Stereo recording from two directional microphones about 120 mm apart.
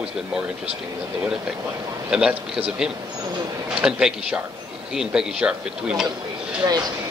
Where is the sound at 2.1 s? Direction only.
5° right (ahead or behind).